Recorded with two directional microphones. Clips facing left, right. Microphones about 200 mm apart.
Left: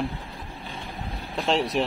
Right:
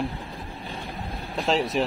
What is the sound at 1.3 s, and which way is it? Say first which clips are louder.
Speech: even; centre (ahead or behind).